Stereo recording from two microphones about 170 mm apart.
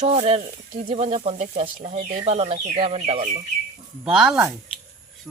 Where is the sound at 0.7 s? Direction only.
50° right (ahead or behind).